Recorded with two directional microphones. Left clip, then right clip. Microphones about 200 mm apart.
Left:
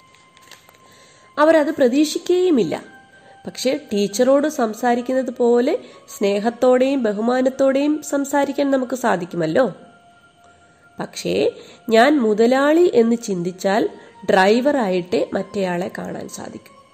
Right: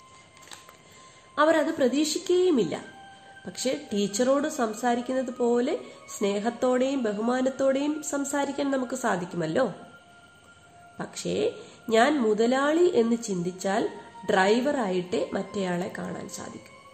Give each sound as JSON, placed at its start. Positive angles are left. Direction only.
{"t": 1.3, "sound": "a woman's voice", "side_deg": 35}
{"t": 11.0, "sound": "a woman's voice", "side_deg": 35}